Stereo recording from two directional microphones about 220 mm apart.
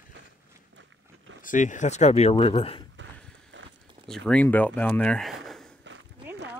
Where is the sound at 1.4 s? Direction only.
35° left (ahead or behind).